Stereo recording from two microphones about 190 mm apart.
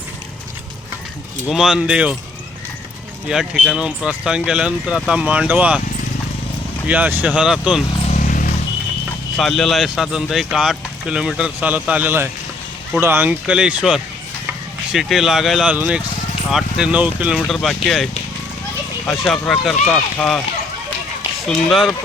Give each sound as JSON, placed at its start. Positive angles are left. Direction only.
{"t": 1.5, "sound": "speech", "side_deg": 0}
{"t": 3.2, "sound": "speech", "side_deg": 0}
{"t": 6.8, "sound": "speech", "side_deg": -10}
{"t": 8.0, "sound": "vehicle", "side_deg": 40}
{"t": 9.4, "sound": "speech", "side_deg": 0}